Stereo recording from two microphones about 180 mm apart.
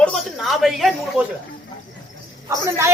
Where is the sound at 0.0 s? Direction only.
Centre (ahead or behind).